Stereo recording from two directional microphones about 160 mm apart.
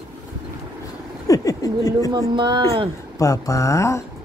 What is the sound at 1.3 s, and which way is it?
Speech, 20° left (ahead or behind).